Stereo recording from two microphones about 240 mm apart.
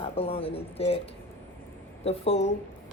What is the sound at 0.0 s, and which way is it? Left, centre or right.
Speech, left.